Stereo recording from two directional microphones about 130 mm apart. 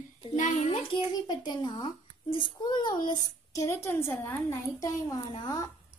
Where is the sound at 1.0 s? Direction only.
35° left (ahead or behind); by 4.3 s 15° left (ahead or behind).